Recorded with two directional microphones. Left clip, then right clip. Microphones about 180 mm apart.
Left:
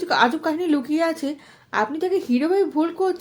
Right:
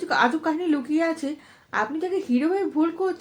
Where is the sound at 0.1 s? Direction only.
45° left (ahead or behind).